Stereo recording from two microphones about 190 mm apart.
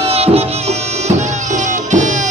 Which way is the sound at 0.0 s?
30° right (ahead or behind).